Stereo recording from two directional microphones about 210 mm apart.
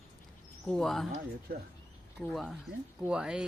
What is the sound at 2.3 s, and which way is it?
Speech, centre (ahead or behind).